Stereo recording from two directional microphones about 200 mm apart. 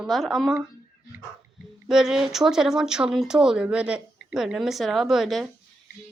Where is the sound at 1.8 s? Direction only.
Centre (ahead or behind).